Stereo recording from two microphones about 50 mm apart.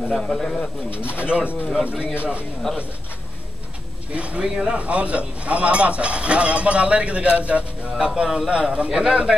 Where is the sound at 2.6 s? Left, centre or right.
Centre.